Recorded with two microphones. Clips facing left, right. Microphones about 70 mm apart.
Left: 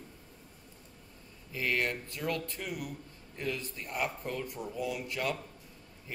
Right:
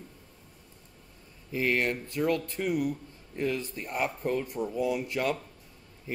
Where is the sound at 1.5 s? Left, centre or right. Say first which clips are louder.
Right 5 dB; right.